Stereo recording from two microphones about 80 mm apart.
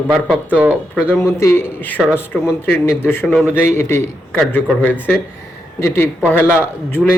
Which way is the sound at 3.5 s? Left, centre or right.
Left.